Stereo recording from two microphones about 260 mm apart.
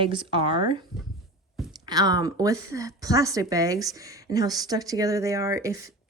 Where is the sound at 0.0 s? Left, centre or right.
Centre.